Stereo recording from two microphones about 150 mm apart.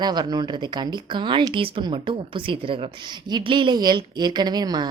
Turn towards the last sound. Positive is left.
turn(degrees=-25)  # may be behind; listen again after turning